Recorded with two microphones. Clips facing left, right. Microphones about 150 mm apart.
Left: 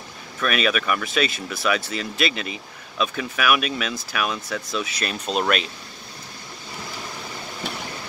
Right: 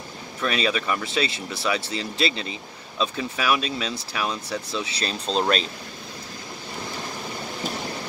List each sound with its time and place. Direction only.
0.4 s speech: 25° right (ahead or behind)